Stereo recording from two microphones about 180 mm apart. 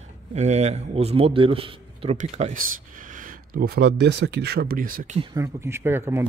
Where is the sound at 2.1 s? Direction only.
45° right (ahead or behind).